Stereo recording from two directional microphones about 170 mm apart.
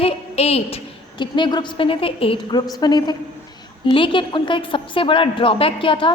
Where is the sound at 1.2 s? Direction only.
25° left (ahead or behind).